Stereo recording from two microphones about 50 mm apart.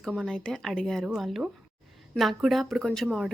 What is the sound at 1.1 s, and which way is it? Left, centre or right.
Speech, centre.